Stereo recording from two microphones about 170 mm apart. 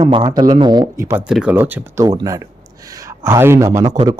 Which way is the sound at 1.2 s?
5° right (ahead or behind).